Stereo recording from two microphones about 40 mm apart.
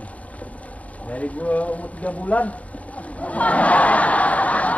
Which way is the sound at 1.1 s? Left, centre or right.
Left.